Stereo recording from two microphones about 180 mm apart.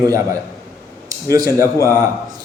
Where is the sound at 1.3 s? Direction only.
15° right (ahead or behind).